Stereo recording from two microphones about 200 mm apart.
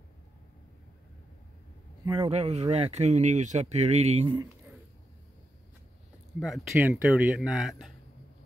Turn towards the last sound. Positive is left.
turn(degrees=0)  # may be behind; listen again after turning